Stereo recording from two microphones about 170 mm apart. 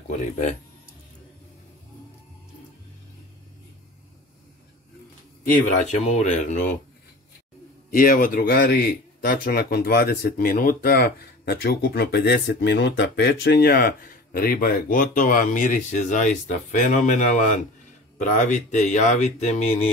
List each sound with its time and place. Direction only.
0.1 s speech: 45° left (ahead or behind)
5.4 s speech: 50° left (ahead or behind)
7.9 s a man's voice: 50° left (ahead or behind)